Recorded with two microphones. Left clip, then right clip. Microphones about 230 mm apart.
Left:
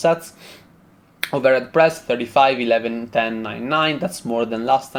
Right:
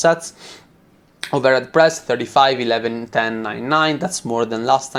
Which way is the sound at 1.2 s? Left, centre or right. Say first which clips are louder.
Right 1 dB; centre.